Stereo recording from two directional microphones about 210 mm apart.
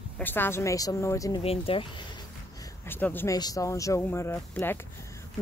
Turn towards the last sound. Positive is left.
turn(degrees=10)  # may be behind; listen again after turning